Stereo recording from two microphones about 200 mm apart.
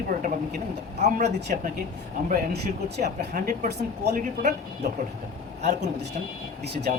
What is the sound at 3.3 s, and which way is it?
Speech, 50° right (ahead or behind).